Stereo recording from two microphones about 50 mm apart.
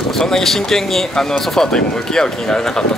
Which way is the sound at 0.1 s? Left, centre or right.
Centre.